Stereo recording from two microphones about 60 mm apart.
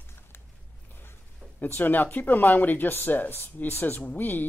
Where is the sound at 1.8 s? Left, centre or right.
Left.